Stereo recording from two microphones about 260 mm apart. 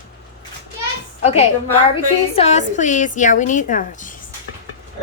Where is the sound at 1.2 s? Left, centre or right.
Left.